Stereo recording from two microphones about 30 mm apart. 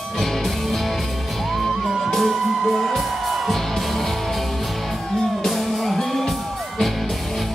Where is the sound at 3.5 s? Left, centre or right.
Centre.